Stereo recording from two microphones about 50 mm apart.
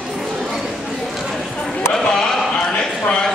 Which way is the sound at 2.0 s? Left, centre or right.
Centre.